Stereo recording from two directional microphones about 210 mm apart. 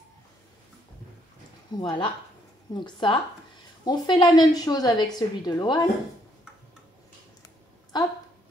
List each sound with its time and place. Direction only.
1.7 s a woman's voice: 20° left (ahead or behind)